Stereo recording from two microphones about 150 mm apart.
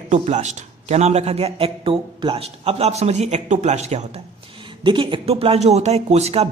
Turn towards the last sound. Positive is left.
turn(degrees=-45)  # may be behind; listen again after turning